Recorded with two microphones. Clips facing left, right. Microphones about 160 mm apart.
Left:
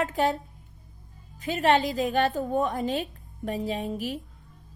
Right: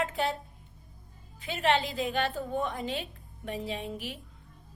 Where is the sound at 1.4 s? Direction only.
40° left (ahead or behind).